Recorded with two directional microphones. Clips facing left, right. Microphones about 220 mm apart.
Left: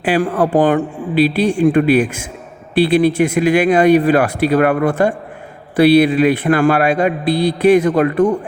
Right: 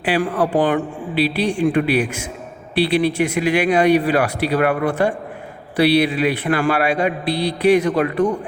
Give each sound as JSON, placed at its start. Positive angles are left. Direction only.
{"t": 0.0, "sound": "a man's voice", "side_deg": 45}